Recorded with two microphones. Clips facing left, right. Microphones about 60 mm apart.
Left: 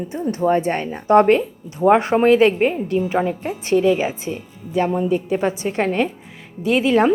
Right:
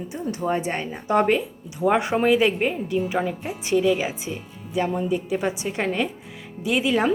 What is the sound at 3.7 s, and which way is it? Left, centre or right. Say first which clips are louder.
A woman's voice: left 4 dB; left.